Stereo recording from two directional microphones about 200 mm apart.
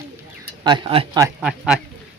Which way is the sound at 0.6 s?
25° right (ahead or behind).